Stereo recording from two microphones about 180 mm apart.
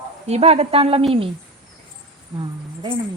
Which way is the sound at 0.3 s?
35° right (ahead or behind).